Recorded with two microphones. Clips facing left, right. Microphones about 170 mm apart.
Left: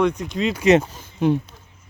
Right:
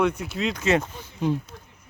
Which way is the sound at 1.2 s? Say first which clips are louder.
Left 6 dB; 70° left (ahead or behind).